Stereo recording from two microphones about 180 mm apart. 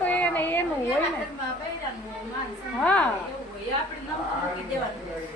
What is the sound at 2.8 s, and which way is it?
Speech, 5° left (ahead or behind).